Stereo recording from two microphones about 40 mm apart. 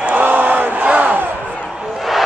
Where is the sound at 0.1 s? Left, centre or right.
Right.